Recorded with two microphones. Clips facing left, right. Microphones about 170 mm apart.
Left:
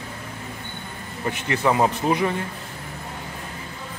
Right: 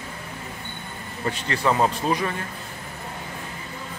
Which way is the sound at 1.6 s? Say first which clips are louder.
Left 1 dB; 15° left (ahead or behind).